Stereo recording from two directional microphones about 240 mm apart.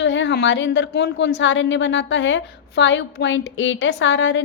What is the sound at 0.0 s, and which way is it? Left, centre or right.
A woman's voice, left.